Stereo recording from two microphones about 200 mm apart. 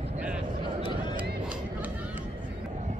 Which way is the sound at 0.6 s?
25° right (ahead or behind).